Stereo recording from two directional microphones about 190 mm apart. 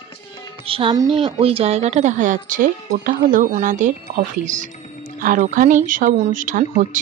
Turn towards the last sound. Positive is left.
turn(degrees=-45)  # may be behind; listen again after turning